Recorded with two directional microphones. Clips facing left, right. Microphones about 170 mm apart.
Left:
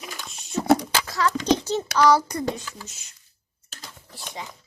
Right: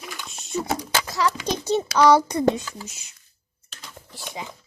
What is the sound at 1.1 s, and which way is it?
A child's voice, 15° right (ahead or behind).